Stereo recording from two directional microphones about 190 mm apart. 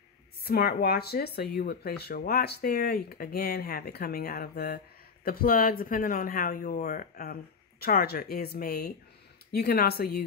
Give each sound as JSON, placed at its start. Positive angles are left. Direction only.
{"t": 0.4, "sound": "speech", "side_deg": 55}